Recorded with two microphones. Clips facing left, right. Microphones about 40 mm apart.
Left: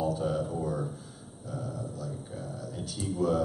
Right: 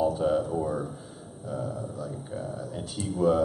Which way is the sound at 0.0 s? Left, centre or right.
Centre.